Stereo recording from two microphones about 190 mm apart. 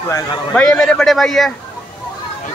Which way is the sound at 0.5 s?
5° left (ahead or behind).